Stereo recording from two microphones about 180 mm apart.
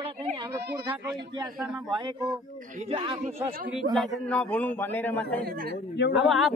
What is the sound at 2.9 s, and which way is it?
Speech, 30° right (ahead or behind).